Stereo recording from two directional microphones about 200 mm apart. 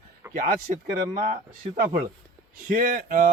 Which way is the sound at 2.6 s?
45° right (ahead or behind).